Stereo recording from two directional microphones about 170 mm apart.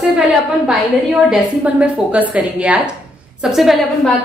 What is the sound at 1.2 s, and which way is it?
A woman's voice, 5° right (ahead or behind).